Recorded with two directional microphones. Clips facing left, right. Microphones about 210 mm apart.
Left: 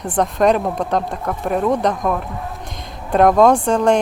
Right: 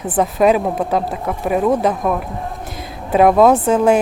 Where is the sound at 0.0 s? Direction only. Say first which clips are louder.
Right 2 dB; 5° right (ahead or behind).